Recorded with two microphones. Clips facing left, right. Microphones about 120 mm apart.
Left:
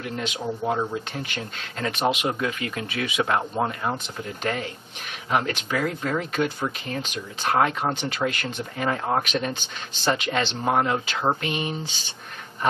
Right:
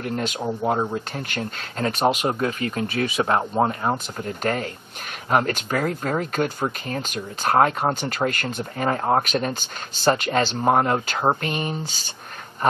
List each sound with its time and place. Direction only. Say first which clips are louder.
0.0 s speech: right 3 dB; 45° right (ahead or behind)
4.2 s speech: right 3 dB; 45° right (ahead or behind)